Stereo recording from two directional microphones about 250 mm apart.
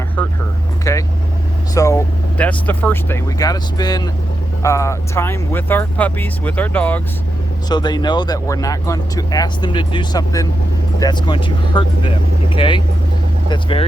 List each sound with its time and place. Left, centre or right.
0.2 s a sound: centre
0.9 s vehicle: centre
1.7 s speech: centre